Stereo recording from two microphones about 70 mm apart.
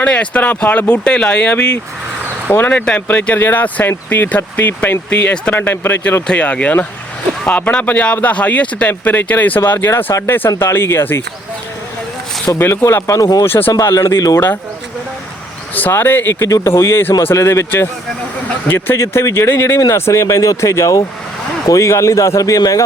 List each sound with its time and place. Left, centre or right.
0.0 s speech: centre
2.6 s speech: centre
5.5 s speech: left
6.2 s speech: centre
12.5 s speech: left
13.1 s speech: left
13.4 s speech: left
13.9 s speech: left
15.7 s speech: left
18.9 s speech: left